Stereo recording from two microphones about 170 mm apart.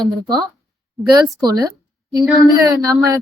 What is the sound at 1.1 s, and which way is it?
A woman's voice, 20° right (ahead or behind).